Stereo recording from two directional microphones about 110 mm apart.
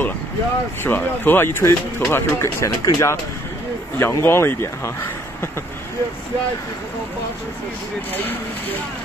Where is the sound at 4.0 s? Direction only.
25° left (ahead or behind).